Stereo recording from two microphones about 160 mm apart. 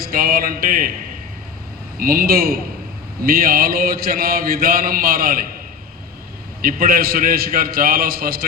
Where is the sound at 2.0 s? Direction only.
65° right (ahead or behind).